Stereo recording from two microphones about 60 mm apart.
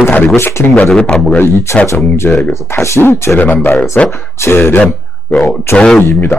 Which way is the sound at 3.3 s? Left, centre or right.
Left.